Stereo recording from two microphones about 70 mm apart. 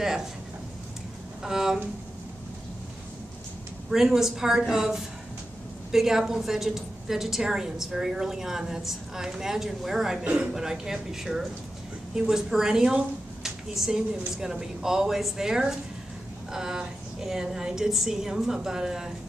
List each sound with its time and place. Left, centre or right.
0.0 s speech: centre
1.4 s speech: centre
3.9 s a woman's voice: centre
10.2 s speech: centre